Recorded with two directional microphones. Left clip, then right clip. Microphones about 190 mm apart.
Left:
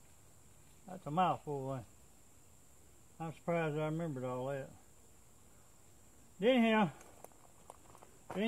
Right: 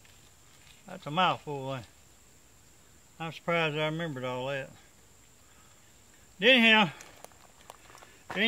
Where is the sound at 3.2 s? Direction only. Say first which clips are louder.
Right 8 dB; 20° right (ahead or behind).